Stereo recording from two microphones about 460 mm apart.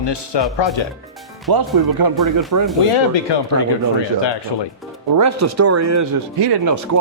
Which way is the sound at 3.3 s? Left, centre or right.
Left.